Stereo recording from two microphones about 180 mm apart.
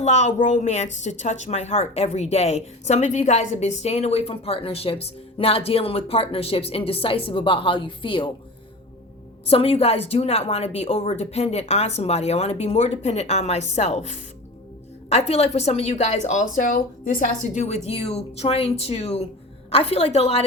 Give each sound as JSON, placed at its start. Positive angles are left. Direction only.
{"t": 0.0, "sound": "a woman's voice", "side_deg": 40}
{"t": 9.5, "sound": "a woman's voice", "side_deg": 35}